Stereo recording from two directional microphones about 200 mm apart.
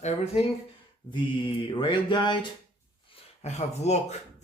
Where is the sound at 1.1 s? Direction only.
25° left (ahead or behind).